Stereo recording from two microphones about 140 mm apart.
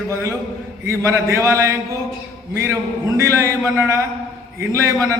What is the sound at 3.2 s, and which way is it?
Speech, 20° right (ahead or behind).